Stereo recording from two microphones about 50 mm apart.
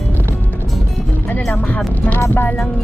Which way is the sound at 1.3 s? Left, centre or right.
Left.